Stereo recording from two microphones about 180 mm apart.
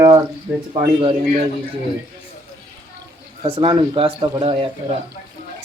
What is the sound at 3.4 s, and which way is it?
Speech, 30° right (ahead or behind).